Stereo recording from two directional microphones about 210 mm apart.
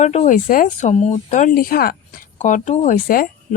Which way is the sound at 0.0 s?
30° left (ahead or behind).